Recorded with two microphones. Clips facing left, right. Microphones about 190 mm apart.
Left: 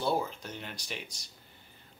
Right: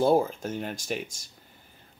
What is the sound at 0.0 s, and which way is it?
Speech, 45° right (ahead or behind).